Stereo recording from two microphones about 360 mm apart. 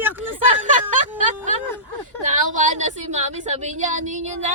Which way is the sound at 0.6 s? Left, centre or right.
Right.